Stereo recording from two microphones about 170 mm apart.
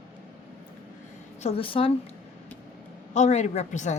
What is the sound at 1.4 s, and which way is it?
Speech, 35° left (ahead or behind).